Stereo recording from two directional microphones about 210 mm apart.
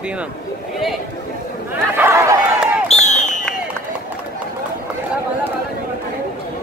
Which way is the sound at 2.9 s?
35° left (ahead or behind).